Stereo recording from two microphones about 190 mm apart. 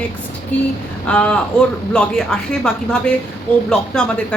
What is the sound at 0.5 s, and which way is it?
A woman's voice, 10° left (ahead or behind).